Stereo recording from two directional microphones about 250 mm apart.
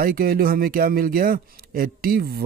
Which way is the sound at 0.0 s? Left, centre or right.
Right.